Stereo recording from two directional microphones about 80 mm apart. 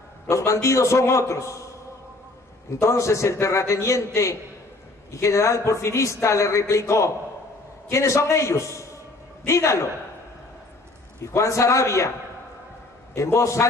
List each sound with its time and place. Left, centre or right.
0.3 s a man's voice: left
2.8 s a man's voice: left
11.3 s a man's voice: left
13.1 s a man's voice: left